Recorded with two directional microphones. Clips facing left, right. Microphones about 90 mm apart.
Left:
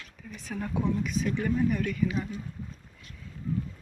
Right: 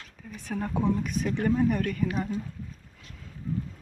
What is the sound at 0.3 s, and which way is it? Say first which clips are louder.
Speech: right 4 dB; 50° right (ahead or behind).